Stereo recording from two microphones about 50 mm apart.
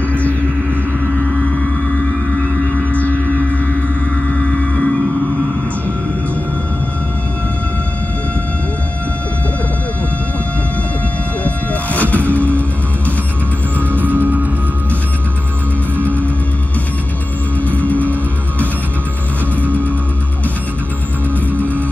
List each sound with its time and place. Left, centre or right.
0.1 s music: left
2.7 s music: left
11.4 s music: left
13.9 s music: right
16.0 s music: left
17.6 s music: left
19.6 s music: left
21.5 s music: left